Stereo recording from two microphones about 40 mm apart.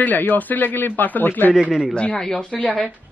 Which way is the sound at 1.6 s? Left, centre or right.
Centre.